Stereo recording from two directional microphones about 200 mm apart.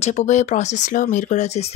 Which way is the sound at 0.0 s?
35° left (ahead or behind).